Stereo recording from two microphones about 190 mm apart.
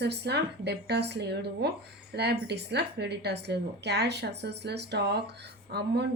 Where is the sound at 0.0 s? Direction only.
60° right (ahead or behind).